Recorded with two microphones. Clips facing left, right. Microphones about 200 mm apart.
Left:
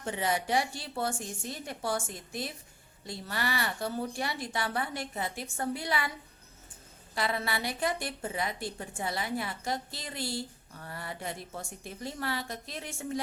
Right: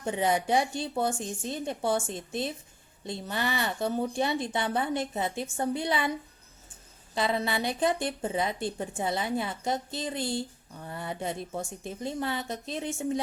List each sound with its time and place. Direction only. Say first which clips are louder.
0.0 s speech: right 4 dB; 20° right (ahead or behind)
7.1 s speech: right 4 dB; 20° right (ahead or behind)